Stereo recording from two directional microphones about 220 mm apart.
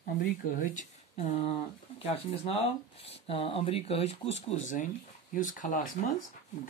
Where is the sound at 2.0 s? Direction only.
25° left (ahead or behind).